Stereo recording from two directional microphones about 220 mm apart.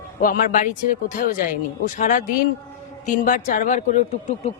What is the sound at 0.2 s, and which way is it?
Speech, 40° left (ahead or behind).